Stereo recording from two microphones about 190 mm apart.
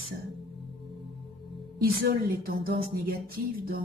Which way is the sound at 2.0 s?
50° right (ahead or behind).